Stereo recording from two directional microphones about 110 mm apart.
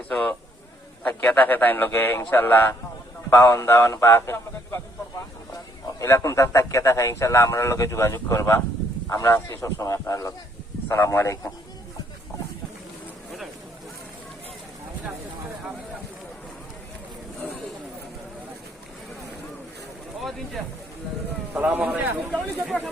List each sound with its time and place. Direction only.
0.1 s a man's voice: 10° left (ahead or behind)
6.0 s speech: 25° left (ahead or behind)
21.5 s speech: 15° right (ahead or behind)
22.3 s speech: centre (ahead or behind)